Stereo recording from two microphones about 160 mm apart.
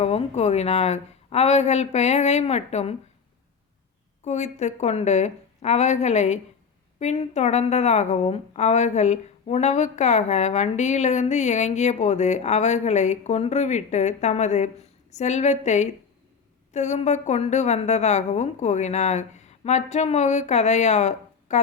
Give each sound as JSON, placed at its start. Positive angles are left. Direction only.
{"t": 0.0, "sound": "a woman's voice", "side_deg": 40}
{"t": 4.2, "sound": "a woman's voice", "side_deg": 45}